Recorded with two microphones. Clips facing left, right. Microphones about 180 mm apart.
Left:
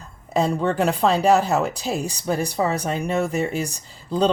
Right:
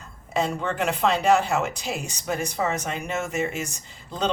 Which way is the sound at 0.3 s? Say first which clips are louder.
Left 5 dB; 35° left (ahead or behind).